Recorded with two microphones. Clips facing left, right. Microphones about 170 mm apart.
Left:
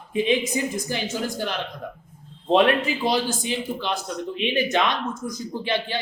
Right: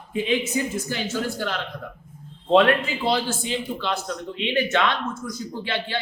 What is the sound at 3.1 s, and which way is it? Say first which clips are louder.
A man's voice: right 2 dB; 15° left (ahead or behind).